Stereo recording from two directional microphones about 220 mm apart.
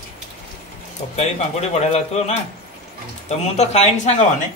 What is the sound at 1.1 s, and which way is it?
A man's voice, 30° left (ahead or behind).